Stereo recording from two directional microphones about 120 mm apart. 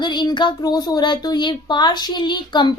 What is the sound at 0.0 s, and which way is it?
Speech, 40° left (ahead or behind).